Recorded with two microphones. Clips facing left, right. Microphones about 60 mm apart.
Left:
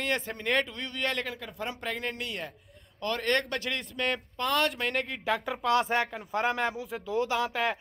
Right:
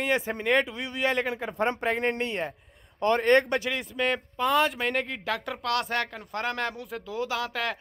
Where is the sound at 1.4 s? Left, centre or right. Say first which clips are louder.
Right 8 dB; right; by 3.6 s centre.